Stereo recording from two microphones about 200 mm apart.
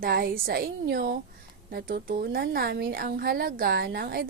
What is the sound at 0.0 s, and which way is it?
A woman's voice, 50° right (ahead or behind).